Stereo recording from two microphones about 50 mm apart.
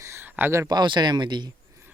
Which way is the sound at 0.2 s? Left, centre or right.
Right.